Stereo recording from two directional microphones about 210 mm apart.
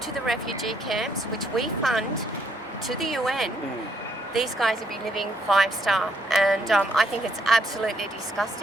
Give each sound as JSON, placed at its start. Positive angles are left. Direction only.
{"t": 0.3, "sound": "a woman's voice", "side_deg": 0}